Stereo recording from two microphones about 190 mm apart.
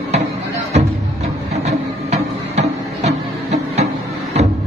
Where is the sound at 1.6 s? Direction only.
35° right (ahead or behind).